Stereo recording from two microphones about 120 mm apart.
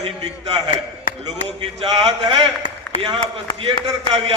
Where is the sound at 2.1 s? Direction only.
45° right (ahead or behind).